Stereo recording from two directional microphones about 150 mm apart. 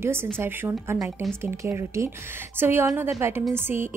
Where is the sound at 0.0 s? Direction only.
15° right (ahead or behind).